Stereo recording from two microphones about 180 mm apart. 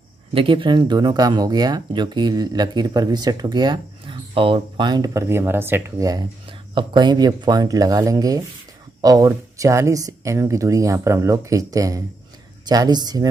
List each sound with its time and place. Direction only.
0.3 s speech: 30° right (ahead or behind)